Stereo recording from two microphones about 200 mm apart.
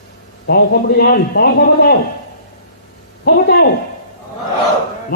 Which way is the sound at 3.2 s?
50° left (ahead or behind).